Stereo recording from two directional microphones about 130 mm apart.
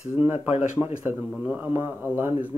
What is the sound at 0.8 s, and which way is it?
Speech, 15° right (ahead or behind).